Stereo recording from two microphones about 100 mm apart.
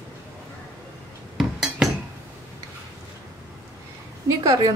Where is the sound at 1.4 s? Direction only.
5° right (ahead or behind).